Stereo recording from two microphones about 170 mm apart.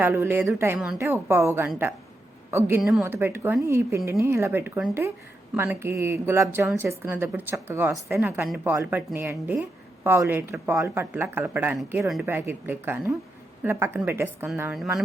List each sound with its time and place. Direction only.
0.0 s a woman's voice: 15° right (ahead or behind)